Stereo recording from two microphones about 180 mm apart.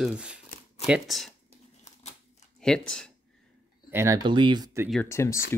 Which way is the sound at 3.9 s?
20° right (ahead or behind).